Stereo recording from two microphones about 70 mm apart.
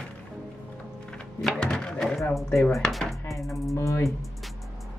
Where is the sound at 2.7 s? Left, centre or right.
Centre.